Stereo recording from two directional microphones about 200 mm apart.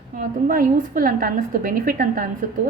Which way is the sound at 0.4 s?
45° right (ahead or behind).